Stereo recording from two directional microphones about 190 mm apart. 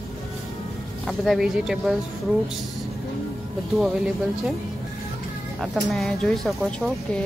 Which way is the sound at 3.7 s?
Centre (ahead or behind).